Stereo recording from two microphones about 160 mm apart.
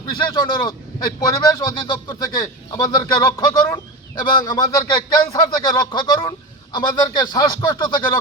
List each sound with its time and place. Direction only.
0.2 s speech: 30° left (ahead or behind)